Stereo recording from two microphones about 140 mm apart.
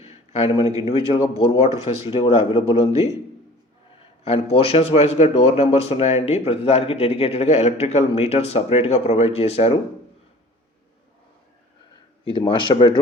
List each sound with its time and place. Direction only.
0.0 s a sound: 45° left (ahead or behind)
1.1 s speech: 40° left (ahead or behind)
4.2 s speech: 45° left (ahead or behind)
12.5 s speech: 40° left (ahead or behind)